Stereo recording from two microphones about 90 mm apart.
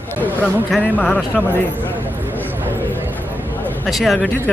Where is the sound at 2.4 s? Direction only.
20° right (ahead or behind).